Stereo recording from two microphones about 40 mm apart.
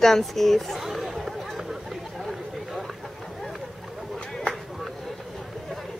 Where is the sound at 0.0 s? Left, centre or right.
Centre.